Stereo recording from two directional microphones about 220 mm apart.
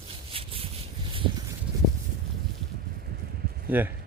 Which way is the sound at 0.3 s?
25° right (ahead or behind).